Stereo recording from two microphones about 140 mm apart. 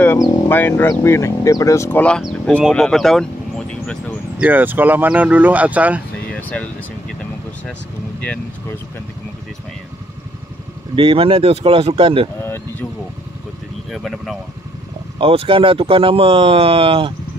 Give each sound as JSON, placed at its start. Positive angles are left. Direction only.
{"t": 0.5, "sound": "speech", "side_deg": 15}
{"t": 4.4, "sound": "speech", "side_deg": -10}
{"t": 6.3, "sound": "air conditioning", "side_deg": 10}
{"t": 8.2, "sound": "speech", "side_deg": 10}
{"t": 11.0, "sound": "speech", "side_deg": -40}
{"t": 13.9, "sound": "speech", "side_deg": 0}
{"t": 15.1, "sound": "speech", "side_deg": -40}